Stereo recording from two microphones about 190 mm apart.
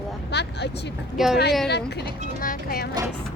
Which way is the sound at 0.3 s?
60° left (ahead or behind).